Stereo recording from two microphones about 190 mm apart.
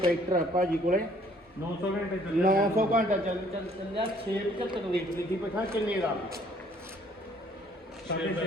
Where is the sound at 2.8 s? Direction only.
45° right (ahead or behind).